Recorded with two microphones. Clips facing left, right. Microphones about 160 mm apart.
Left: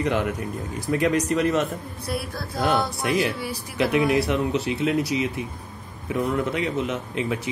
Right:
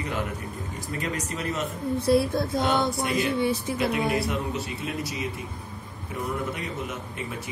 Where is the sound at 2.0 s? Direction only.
25° right (ahead or behind).